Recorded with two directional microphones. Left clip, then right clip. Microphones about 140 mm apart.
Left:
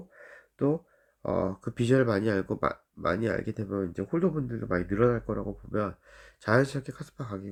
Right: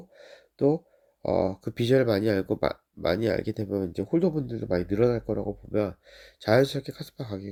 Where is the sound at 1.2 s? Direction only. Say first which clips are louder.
Right 4 dB; 35° right (ahead or behind).